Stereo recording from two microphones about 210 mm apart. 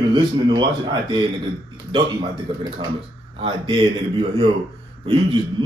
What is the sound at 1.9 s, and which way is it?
A man's voice, 25° right (ahead or behind).